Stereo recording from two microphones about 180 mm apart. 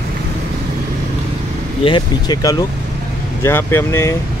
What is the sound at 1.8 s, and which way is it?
Speech, 25° left (ahead or behind).